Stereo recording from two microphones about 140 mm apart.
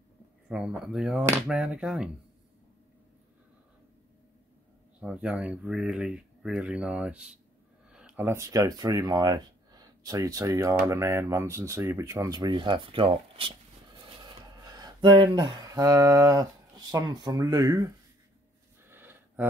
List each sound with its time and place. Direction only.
0.5 s speech: 5° right (ahead or behind)
5.0 s speech: 5° right (ahead or behind)
7.9 s a sound: 5° right (ahead or behind)
8.3 s speech: 20° right (ahead or behind)
12.4 s speech: 35° right (ahead or behind)
18.9 s a sound: 15° right (ahead or behind)